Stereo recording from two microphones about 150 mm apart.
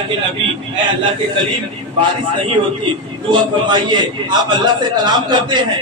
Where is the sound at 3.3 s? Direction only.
30° right (ahead or behind).